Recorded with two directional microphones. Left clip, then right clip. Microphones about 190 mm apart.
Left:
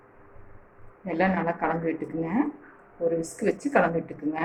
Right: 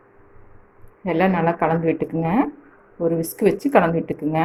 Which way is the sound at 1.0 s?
50° right (ahead or behind).